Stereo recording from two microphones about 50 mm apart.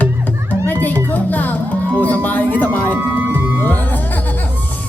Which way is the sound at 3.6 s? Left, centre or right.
Left.